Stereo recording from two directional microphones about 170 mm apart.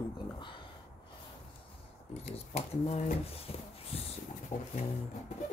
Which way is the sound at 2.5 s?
40° left (ahead or behind).